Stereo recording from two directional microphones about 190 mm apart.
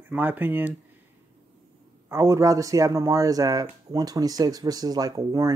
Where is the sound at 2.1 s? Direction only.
15° right (ahead or behind).